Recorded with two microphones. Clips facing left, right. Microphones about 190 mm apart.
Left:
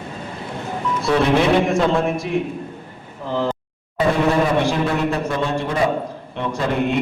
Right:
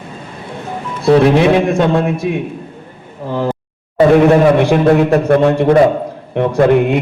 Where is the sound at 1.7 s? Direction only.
65° right (ahead or behind).